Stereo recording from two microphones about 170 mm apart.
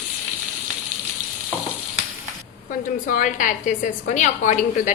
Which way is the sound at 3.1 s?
50° left (ahead or behind).